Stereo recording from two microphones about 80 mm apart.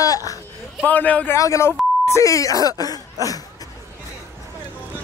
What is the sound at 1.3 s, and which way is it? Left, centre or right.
Speech, left.